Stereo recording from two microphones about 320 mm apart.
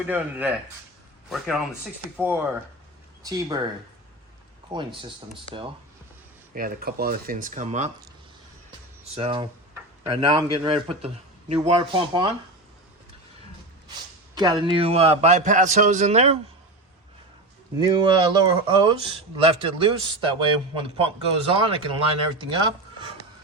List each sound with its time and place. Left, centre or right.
0.1 s speech: centre
3.2 s speech: centre
4.7 s speech: centre
6.5 s a man's voice: right
9.1 s speech: centre
14.3 s a man's voice: centre
17.7 s speech: centre